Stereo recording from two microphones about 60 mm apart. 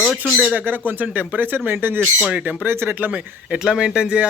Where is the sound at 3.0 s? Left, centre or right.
Right.